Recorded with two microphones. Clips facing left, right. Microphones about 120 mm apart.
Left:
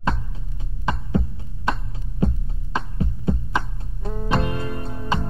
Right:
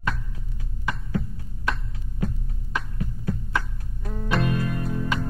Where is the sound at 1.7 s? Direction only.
25° left (ahead or behind).